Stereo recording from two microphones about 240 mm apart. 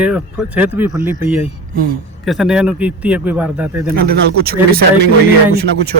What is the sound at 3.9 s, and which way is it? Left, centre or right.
Speech, right.